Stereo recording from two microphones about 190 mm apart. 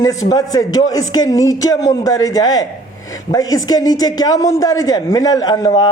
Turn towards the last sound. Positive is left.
turn(degrees=20)  # may be behind; listen again after turning